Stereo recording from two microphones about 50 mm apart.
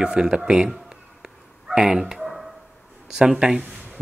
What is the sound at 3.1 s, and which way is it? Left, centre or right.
Speech, centre.